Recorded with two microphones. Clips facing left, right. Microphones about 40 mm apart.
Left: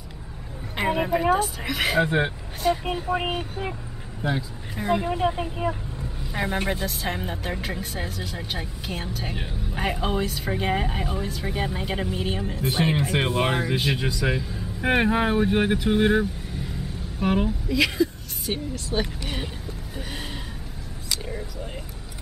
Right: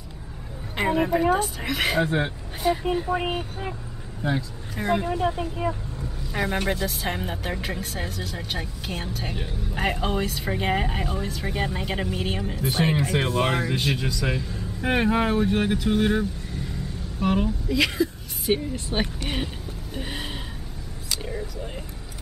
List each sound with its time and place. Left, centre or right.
0.7 s speech: centre
2.0 s a man's voice: centre
2.6 s a woman's voice: centre
3.1 s a man's voice: centre
4.7 s speech: centre
5.1 s speech: centre
5.6 s vehicle: centre
6.7 s speech: centre
12.5 s a man's voice: centre
13.1 s a man's voice: centre
18.4 s a woman's voice: centre
20.0 s a sound: centre